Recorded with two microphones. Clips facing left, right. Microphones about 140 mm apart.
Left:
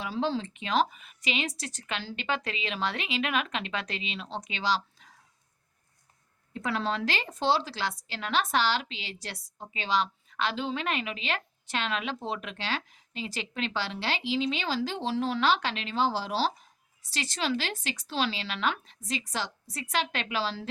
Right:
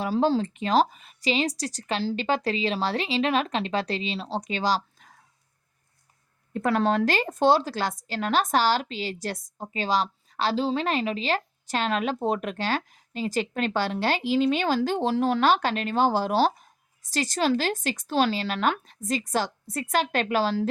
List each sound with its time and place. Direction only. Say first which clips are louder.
0.0 s speech: right 7 dB; 40° right (ahead or behind)
6.5 s a woman's voice: right 7 dB; 50° right (ahead or behind)